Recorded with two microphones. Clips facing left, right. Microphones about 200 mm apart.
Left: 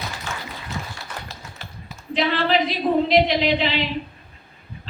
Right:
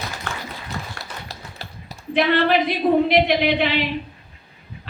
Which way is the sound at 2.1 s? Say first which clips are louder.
Right 3 dB; 55° right (ahead or behind).